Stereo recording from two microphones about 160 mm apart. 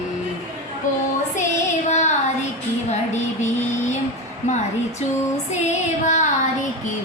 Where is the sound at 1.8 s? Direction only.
45° left (ahead or behind).